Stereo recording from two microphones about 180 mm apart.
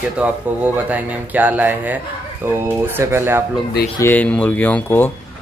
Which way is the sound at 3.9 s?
10° left (ahead or behind).